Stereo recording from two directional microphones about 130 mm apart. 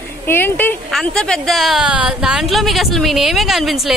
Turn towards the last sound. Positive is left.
turn(degrees=0)  # may be behind; listen again after turning